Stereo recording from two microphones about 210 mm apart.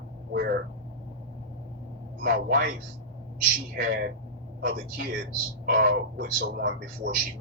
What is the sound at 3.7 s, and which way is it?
A man's voice, 45° right (ahead or behind).